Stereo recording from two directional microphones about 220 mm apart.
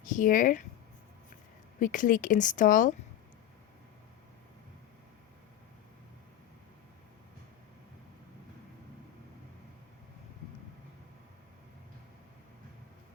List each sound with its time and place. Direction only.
0.0 s speech: 35° left (ahead or behind)
1.8 s speech: 35° left (ahead or behind)